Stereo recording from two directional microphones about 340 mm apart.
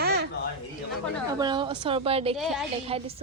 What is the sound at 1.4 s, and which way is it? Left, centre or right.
Speech, centre.